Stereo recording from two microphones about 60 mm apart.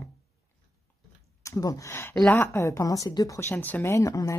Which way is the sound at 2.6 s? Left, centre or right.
Left.